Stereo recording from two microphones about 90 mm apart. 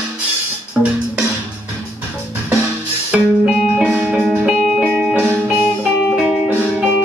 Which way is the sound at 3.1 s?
10° right (ahead or behind).